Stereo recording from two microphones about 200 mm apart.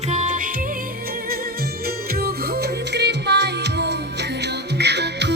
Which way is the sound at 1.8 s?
50° right (ahead or behind).